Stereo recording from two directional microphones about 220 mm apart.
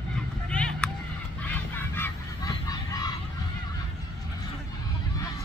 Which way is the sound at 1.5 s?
10° left (ahead or behind).